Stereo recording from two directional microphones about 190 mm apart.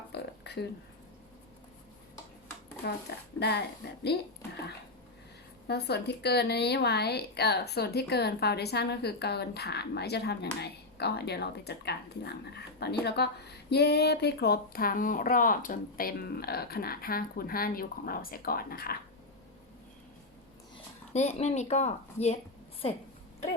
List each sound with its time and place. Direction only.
0.1 s a sound: 60° left (ahead or behind)
3.1 s a woman's voice: 60° left (ahead or behind)
5.6 s a woman's voice: 60° left (ahead or behind)
21.1 s a woman's voice: 35° left (ahead or behind)